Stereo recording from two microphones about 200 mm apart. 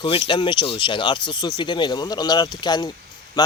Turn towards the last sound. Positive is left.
turn(degrees=20)  # may be behind; listen again after turning